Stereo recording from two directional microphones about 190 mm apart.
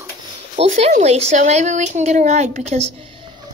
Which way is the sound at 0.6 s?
30° right (ahead or behind).